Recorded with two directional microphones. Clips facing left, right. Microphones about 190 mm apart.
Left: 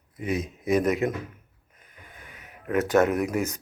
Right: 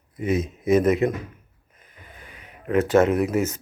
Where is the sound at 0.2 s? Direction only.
Centre (ahead or behind).